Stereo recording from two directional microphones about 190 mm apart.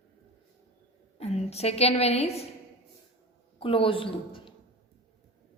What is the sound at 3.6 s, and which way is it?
Speech, 30° left (ahead or behind).